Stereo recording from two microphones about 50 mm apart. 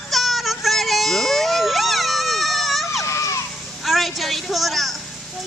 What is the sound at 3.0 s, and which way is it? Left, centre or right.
Children playing, left.